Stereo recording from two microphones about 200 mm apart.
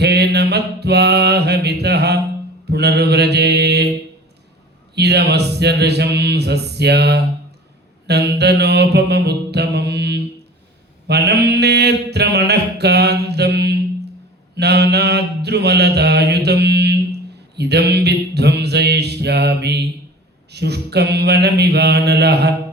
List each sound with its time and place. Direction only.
0.0 s mantra: 55° right (ahead or behind)
4.9 s speech: 55° right (ahead or behind)
8.0 s mantra: 55° right (ahead or behind)